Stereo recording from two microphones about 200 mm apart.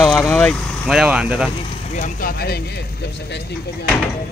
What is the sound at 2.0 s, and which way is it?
Speech, 40° left (ahead or behind).